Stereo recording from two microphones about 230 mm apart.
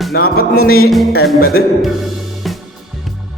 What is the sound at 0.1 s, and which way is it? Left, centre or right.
Music, left.